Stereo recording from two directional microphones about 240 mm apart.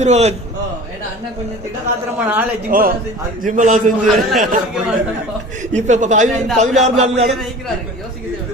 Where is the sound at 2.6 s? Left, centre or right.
Right.